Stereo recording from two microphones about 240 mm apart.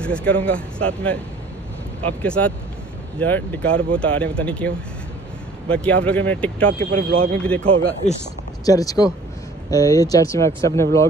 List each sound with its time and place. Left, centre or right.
0.0 s speech: centre
8.0 s speech: left
8.6 s speech: centre